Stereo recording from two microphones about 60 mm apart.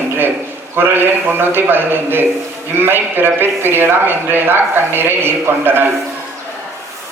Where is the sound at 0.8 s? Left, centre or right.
Right.